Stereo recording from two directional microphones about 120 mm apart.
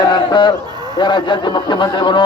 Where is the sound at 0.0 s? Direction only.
40° left (ahead or behind).